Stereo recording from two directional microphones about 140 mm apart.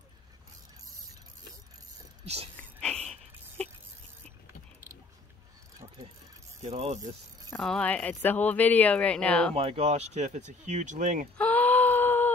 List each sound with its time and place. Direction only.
2.2 s speech: 50° right (ahead or behind)
2.8 s a sound: 5° left (ahead or behind)
6.6 s speech: 50° right (ahead or behind)
7.5 s speech: 5° left (ahead or behind)
9.6 s speech: 45° right (ahead or behind); by 11.2 s 65° right (ahead or behind)
11.3 s a sound: 10° left (ahead or behind)